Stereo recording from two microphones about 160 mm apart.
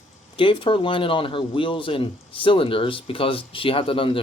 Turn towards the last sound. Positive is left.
turn(degrees=35)  # may be behind; listen again after turning